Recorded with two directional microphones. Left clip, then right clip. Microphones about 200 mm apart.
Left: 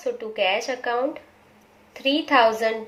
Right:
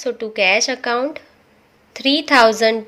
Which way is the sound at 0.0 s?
50° right (ahead or behind).